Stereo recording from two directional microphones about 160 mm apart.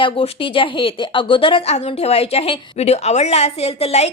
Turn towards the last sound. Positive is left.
turn(degrees=40)  # may be behind; listen again after turning